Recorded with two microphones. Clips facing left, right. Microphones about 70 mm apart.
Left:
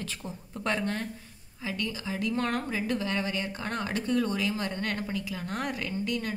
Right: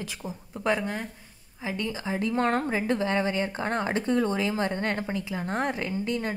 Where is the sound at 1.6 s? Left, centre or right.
Right.